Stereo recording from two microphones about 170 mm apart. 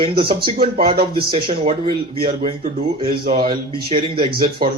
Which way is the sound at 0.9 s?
60° right (ahead or behind).